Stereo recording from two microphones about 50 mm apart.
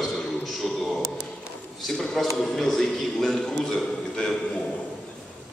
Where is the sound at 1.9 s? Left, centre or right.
Centre.